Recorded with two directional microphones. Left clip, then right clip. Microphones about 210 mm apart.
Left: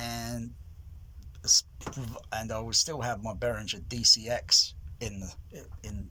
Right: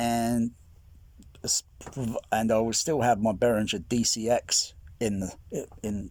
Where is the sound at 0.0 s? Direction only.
35° right (ahead or behind).